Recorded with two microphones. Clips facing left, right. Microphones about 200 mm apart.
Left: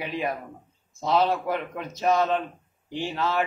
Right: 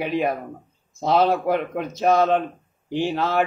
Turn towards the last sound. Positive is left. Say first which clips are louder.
# right 5 dB
turn(degrees=-60)  # may be behind; listen again after turning